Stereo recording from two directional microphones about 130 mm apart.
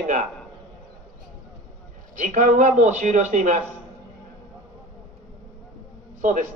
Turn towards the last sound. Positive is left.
turn(degrees=-75)  # may be behind; listen again after turning